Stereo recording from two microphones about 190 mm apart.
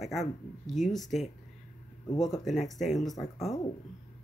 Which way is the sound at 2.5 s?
Centre (ahead or behind).